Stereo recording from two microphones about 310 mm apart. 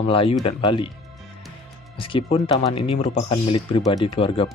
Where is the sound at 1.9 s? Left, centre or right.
Centre.